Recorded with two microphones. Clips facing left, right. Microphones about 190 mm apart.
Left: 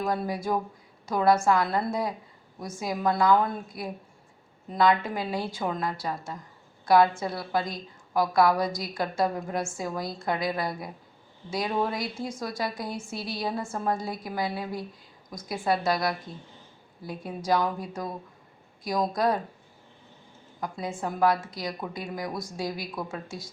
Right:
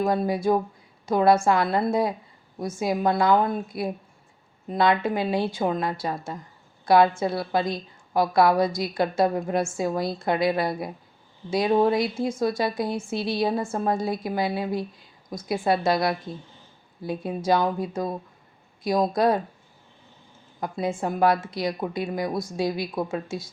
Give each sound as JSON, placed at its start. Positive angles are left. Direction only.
{"t": 0.0, "sound": "a woman's voice", "side_deg": -25}
{"t": 20.6, "sound": "a woman's voice", "side_deg": -25}